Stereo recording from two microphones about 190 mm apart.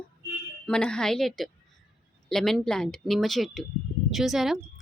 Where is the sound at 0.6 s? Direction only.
5° left (ahead or behind).